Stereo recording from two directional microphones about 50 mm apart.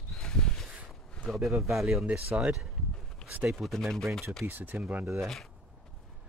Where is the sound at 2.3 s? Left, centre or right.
Right.